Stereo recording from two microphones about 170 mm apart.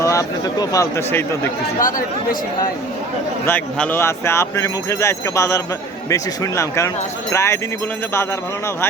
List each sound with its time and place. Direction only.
0.0 s speech: 20° left (ahead or behind)
3.4 s speech: 10° left (ahead or behind)